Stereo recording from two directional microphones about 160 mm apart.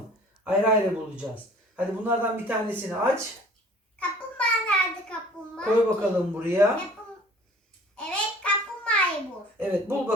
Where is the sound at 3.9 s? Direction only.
10° left (ahead or behind).